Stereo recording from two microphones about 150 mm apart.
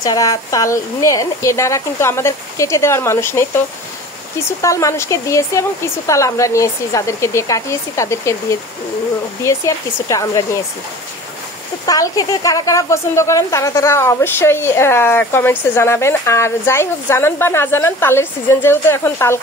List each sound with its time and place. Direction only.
0.0 s speech: 25° left (ahead or behind)
11.8 s speech: 25° left (ahead or behind)